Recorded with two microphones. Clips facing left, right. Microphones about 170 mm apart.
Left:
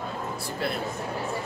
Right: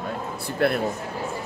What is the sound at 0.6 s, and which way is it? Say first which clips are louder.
Speech: right 9 dB; 60° right (ahead or behind).